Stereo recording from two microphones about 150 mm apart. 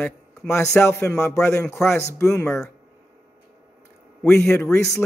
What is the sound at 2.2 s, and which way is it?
Speech, 20° left (ahead or behind).